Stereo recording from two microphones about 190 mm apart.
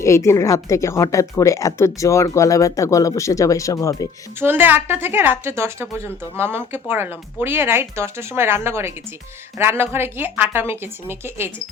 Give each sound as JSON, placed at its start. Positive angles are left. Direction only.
{"t": 0.0, "sound": "speech", "side_deg": 15}
{"t": 4.4, "sound": "speech", "side_deg": -10}